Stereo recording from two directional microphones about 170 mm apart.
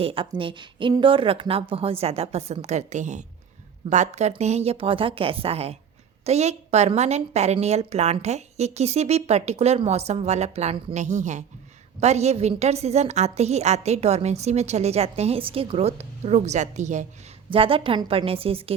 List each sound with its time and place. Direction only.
0.0 s a woman's voice: 30° right (ahead or behind)
17.5 s a woman's voice: 30° right (ahead or behind)